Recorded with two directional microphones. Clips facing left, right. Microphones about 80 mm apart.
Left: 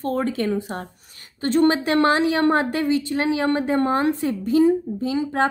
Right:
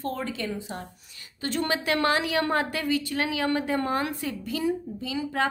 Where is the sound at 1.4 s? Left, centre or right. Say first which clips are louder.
Left 9 dB; left.